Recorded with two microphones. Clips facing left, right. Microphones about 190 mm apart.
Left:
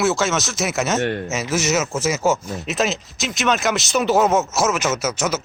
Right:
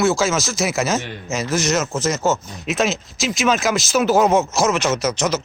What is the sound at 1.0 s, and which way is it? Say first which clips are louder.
Speech: left 8 dB; 60° left (ahead or behind).